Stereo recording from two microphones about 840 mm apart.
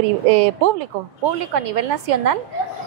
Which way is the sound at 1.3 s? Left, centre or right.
Right.